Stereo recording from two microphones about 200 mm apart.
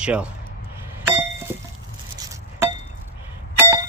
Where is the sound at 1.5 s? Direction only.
10° right (ahead or behind).